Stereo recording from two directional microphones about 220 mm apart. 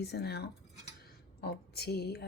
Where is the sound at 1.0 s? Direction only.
45° left (ahead or behind).